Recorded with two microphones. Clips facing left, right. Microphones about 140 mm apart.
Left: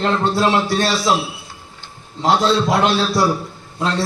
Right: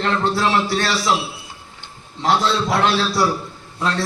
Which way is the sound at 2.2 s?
20° left (ahead or behind).